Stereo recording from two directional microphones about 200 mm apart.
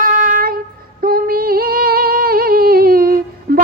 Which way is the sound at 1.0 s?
50° right (ahead or behind).